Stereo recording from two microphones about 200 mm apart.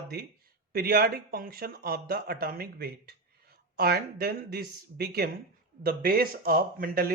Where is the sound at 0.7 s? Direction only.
50° right (ahead or behind).